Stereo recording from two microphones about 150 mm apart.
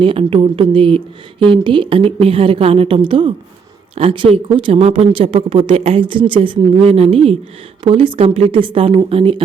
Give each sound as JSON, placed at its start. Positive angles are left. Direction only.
{"t": 0.0, "sound": "speech", "side_deg": -35}